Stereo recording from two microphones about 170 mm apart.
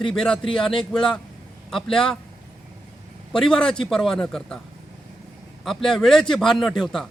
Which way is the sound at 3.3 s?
5° left (ahead or behind).